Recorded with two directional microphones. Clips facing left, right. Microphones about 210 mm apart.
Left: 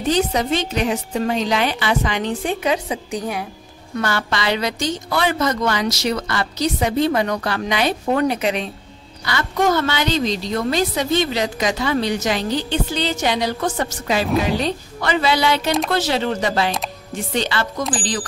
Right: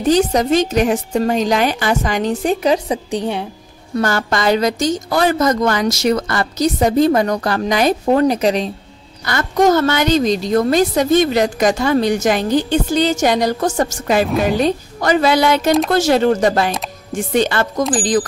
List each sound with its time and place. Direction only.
0.0 s a woman's voice: 45° right (ahead or behind)
3.9 s a woman's voice: 45° right (ahead or behind)